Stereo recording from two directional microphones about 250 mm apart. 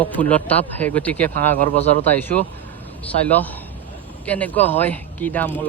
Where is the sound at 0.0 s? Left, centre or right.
Centre.